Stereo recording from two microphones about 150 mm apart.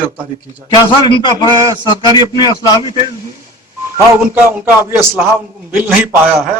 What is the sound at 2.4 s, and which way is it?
Speech, 25° left (ahead or behind).